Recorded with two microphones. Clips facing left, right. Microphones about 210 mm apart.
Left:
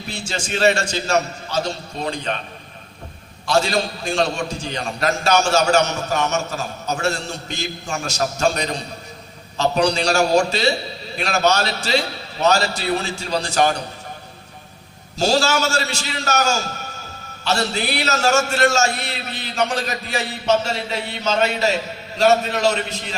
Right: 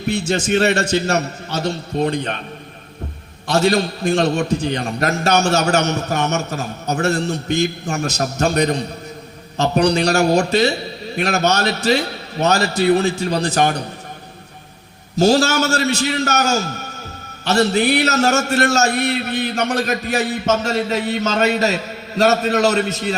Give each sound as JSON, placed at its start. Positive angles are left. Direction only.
{"t": 0.0, "sound": "a man's voice", "side_deg": -60}
{"t": 3.4, "sound": "a man's voice", "side_deg": -60}
{"t": 15.1, "sound": "a man's voice", "side_deg": -60}